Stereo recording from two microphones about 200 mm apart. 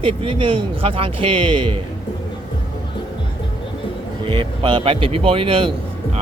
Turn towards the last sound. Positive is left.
turn(degrees=-25)  # may be behind; listen again after turning